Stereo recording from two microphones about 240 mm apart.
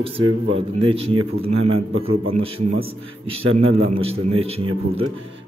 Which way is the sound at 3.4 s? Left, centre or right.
Right.